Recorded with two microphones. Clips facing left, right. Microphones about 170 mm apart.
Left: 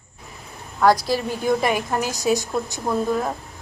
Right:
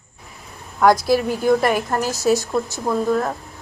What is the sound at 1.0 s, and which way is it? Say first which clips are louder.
Speech: right 5 dB; 5° right (ahead or behind).